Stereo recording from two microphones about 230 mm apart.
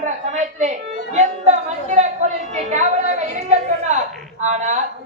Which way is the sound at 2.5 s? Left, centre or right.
Right.